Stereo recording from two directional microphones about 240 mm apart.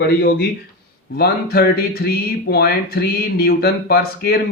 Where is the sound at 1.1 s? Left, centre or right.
Left.